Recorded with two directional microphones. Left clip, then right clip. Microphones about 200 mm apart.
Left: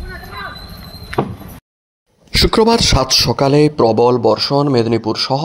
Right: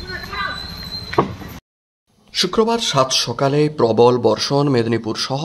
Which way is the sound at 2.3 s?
30° left (ahead or behind).